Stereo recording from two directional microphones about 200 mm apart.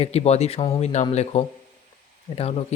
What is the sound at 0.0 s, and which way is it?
Speech, 30° left (ahead or behind).